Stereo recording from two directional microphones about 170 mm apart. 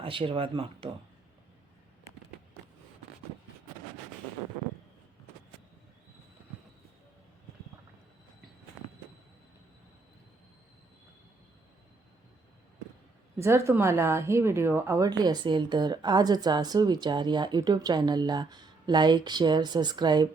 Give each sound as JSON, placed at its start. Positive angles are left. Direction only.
{"t": 0.0, "sound": "speech", "side_deg": -30}
{"t": 13.4, "sound": "a woman's voice", "side_deg": -15}